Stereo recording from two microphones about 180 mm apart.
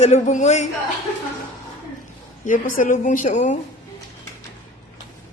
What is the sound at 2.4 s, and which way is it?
A woman's voice, 50° left (ahead or behind).